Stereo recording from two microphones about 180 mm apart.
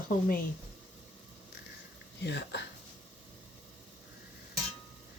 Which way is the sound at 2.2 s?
70° left (ahead or behind).